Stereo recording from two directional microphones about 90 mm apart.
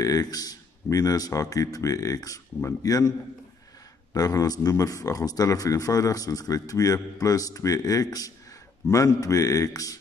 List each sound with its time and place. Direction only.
0.0 s a man's voice: 40° left (ahead or behind)
4.1 s a man's voice: 40° left (ahead or behind)